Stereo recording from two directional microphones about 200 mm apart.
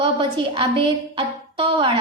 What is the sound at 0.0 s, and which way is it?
A woman's voice, 25° right (ahead or behind).